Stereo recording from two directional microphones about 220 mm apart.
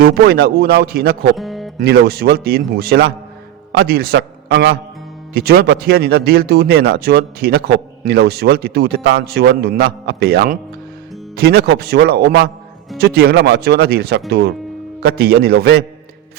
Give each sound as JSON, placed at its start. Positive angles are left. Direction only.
{"t": 0.0, "sound": "speech", "side_deg": -45}
{"t": 1.4, "sound": "music", "side_deg": 0}
{"t": 1.8, "sound": "a man's voice", "side_deg": -45}